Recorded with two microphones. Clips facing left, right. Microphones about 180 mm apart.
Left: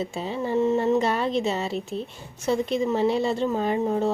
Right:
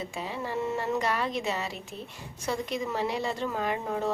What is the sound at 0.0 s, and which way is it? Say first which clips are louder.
A woman's voice: left 6 dB; 25° left (ahead or behind).